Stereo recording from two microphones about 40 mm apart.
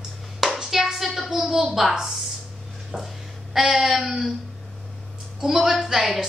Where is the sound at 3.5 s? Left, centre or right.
Centre.